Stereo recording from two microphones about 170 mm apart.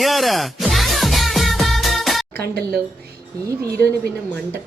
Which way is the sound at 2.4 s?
70° right (ahead or behind).